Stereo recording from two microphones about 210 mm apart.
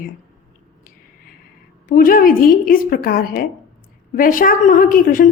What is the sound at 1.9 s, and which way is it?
A woman's voice, 40° left (ahead or behind).